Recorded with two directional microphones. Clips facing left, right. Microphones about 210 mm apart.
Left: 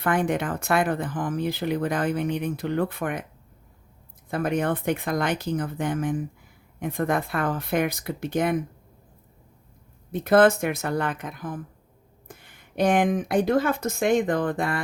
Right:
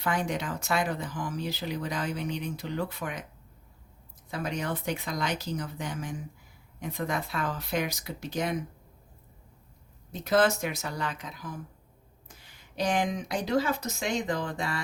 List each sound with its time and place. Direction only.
0.0 s speech: 55° left (ahead or behind)
4.3 s speech: 55° left (ahead or behind)
10.1 s speech: 55° left (ahead or behind)